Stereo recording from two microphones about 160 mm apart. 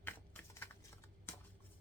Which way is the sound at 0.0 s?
10° left (ahead or behind).